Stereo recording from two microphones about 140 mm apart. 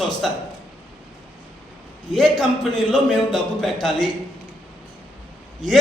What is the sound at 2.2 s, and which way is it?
A man's voice, centre (ahead or behind).